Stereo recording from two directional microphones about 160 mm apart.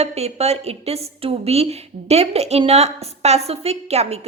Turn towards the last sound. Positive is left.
turn(degrees=-40)  # may be behind; listen again after turning